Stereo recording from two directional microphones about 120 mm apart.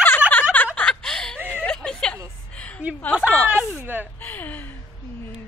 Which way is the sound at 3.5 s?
15° right (ahead or behind).